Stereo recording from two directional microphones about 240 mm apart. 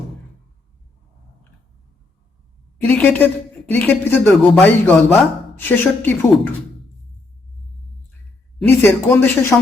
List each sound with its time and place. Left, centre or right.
2.8 s speech: centre
8.8 s speech: centre